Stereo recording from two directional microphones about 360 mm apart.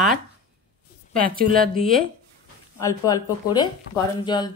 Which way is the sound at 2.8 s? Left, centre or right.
Centre.